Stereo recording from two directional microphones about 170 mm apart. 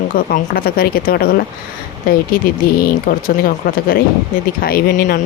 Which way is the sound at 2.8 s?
55° left (ahead or behind).